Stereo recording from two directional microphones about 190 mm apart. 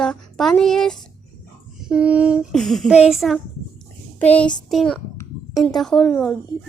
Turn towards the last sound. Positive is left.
turn(degrees=5)  # may be behind; listen again after turning